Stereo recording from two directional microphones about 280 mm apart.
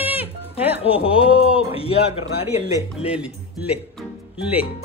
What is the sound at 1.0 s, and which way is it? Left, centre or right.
A man's voice, centre.